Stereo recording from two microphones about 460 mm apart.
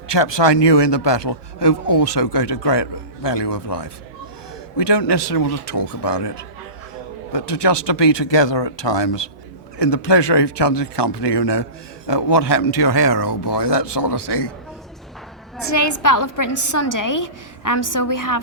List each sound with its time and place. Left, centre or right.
0.1 s a man's voice: left
15.6 s a woman's voice: left